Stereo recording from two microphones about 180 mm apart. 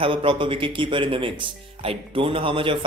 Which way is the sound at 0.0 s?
30° right (ahead or behind).